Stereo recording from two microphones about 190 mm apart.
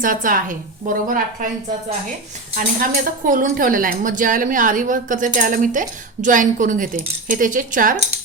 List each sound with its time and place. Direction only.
0.0 s a woman's voice: 45° right (ahead or behind)
2.6 s a woman's voice: 45° right (ahead or behind)